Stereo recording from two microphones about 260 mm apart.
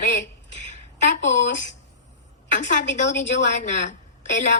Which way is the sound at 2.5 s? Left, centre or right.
Left.